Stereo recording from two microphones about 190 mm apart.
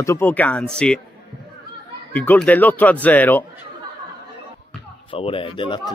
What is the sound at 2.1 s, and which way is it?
Speech, 5° left (ahead or behind).